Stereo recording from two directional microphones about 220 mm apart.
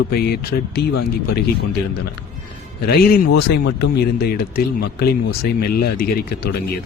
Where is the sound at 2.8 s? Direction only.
45° left (ahead or behind).